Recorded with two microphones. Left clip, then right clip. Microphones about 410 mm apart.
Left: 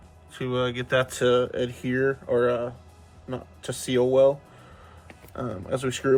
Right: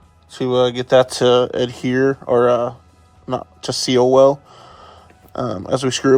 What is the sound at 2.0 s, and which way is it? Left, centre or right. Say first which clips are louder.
Speech: right 8 dB; right.